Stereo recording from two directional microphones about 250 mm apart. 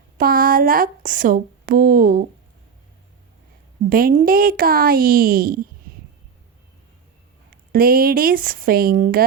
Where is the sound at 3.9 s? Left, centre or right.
Right.